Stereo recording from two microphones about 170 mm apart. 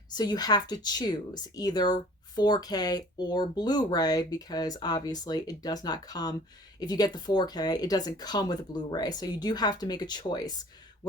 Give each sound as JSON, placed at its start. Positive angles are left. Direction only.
{"t": 0.1, "sound": "speech", "side_deg": 25}